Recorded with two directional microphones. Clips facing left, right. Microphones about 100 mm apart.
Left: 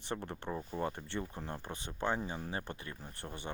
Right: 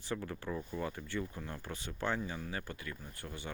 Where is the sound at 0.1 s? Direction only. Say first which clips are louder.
Even; 25° left (ahead or behind).